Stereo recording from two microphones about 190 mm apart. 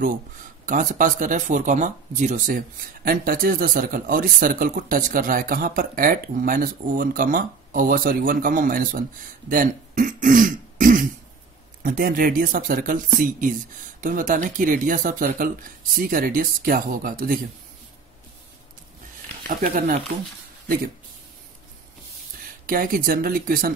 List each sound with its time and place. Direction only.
0.7 s speech: 45° right (ahead or behind)
19.6 s speech: 45° right (ahead or behind)
22.7 s speech: 45° right (ahead or behind)